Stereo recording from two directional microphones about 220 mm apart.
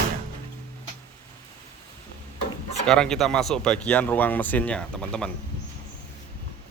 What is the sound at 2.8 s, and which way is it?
Speech, 5° left (ahead or behind).